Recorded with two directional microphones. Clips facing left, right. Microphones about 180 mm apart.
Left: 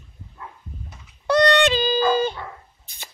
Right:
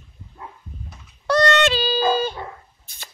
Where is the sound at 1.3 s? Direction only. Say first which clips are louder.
Left 1 dB; 15° left (ahead or behind).